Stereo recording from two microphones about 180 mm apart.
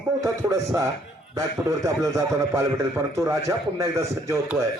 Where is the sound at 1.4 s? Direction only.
15° right (ahead or behind).